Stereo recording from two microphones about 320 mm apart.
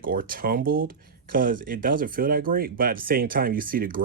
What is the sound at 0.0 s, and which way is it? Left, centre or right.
Speech, right.